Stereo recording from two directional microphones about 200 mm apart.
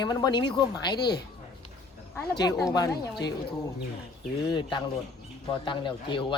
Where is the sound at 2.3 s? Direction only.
20° left (ahead or behind).